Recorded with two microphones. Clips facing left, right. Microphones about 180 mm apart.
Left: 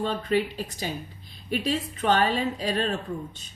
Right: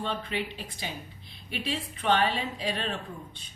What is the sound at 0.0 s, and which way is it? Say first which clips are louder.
A woman's voice: left 7 dB; 40° left (ahead or behind).